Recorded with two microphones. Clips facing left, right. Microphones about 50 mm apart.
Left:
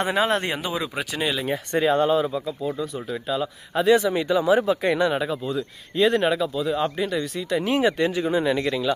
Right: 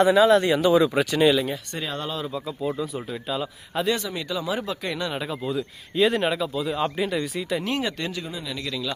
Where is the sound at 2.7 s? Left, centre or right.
Centre.